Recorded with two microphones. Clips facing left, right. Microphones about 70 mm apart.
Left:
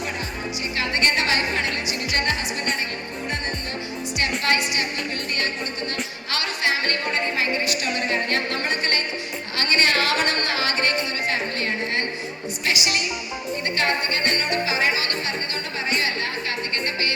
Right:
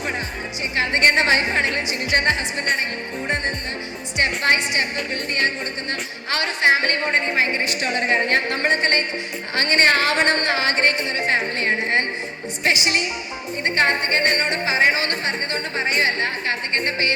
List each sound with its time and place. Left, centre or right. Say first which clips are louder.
0.8 s music: right 5 dB; right
4.2 s music: right 3 dB; right
6.3 s a sound: right 6 dB; right
12.6 s music: right 4 dB; right